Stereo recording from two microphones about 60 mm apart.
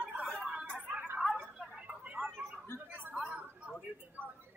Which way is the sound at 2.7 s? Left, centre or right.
Left.